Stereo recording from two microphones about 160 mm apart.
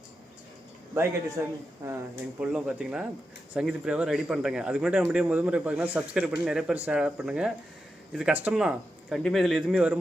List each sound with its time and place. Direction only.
1.4 s speech: 15° right (ahead or behind)
2.4 s speech: 5° right (ahead or behind)